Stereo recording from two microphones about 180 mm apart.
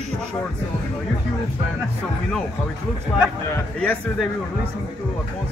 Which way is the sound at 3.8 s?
5° left (ahead or behind).